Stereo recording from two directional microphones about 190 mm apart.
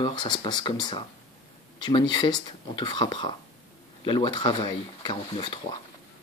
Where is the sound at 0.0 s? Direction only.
25° left (ahead or behind).